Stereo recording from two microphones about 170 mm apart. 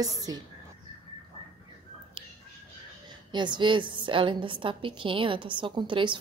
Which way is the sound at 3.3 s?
25° right (ahead or behind).